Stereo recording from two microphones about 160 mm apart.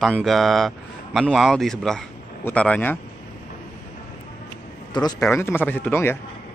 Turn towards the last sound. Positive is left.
turn(degrees=15)  # may be behind; listen again after turning